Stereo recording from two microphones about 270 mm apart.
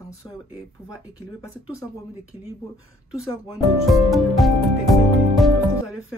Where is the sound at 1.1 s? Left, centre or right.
Centre.